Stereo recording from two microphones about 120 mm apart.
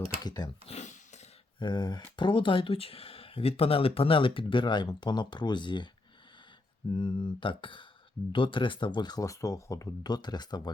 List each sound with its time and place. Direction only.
0.2 s speech: 35° left (ahead or behind)
0.6 s a sound: 65° left (ahead or behind)
1.5 s speech: 40° left (ahead or behind)
6.9 s speech: 40° left (ahead or behind)